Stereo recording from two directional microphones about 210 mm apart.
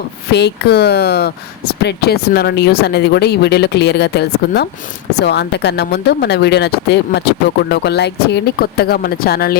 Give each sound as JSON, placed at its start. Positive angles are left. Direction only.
{"t": 0.3, "sound": "speech", "side_deg": 55}